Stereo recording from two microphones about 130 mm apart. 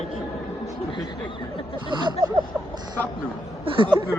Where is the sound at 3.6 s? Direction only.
45° right (ahead or behind).